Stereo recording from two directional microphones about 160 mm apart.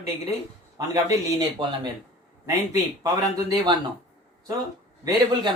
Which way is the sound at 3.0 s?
25° right (ahead or behind).